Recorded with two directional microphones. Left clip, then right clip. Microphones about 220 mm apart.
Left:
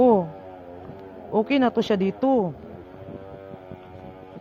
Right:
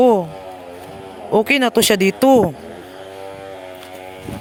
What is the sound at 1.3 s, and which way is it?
Speech, 40° right (ahead or behind).